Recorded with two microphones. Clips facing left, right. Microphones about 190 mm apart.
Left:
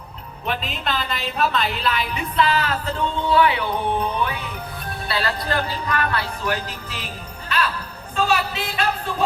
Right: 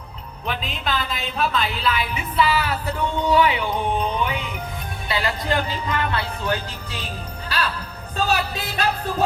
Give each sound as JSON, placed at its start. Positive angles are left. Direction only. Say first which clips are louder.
{"t": 0.4, "sound": "a woman's voice", "louder": "left 1 dB", "side_deg": 0}
{"t": 5.0, "sound": "speech", "louder": "right 1 dB", "side_deg": -15}
{"t": 8.1, "sound": "music", "louder": "left 1 dB", "side_deg": -40}